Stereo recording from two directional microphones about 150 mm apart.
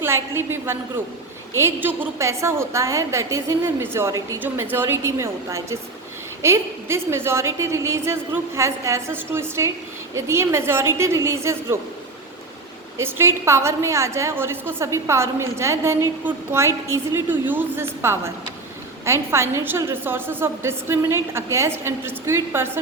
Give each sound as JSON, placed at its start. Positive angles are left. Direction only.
{"t": 0.0, "sound": "a woman's voice", "side_deg": -15}
{"t": 13.0, "sound": "a woman's voice", "side_deg": -15}